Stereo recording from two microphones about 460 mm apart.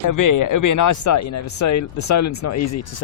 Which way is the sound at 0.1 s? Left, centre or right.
Left.